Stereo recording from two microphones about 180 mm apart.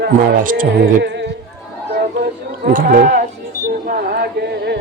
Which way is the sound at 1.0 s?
75° right (ahead or behind).